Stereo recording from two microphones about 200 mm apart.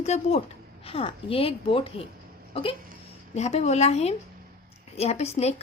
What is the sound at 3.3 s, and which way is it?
A woman's voice, 35° left (ahead or behind).